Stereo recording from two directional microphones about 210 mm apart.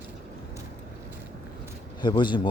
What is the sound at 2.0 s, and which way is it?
Speech, 20° left (ahead or behind).